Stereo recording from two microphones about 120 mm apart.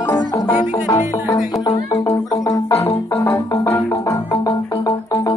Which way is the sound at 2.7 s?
20° left (ahead or behind).